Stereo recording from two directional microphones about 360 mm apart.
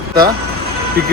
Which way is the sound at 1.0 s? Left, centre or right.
Right.